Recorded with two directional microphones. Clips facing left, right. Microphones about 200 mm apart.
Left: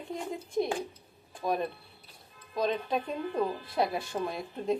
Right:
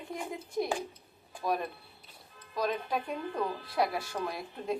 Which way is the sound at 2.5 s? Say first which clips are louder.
Left 2 dB; 25° left (ahead or behind).